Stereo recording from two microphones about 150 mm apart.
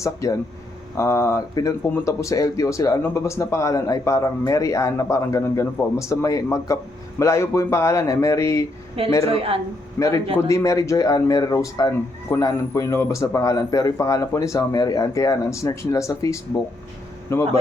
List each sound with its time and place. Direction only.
0.0 s speech: 20° left (ahead or behind)
9.2 s a woman's voice: 40° right (ahead or behind)
10.0 s a man's voice: 15° left (ahead or behind)